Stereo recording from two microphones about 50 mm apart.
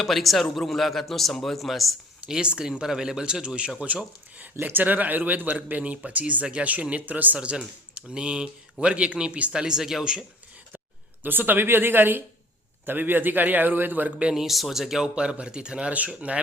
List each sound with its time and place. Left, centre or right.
0.0 s a man's voice: centre
2.2 s speech: centre
4.6 s speech: right
7.3 s speech: centre
11.2 s speech: right
14.3 s speech: centre
15.0 s speech: centre
15.9 s speech: right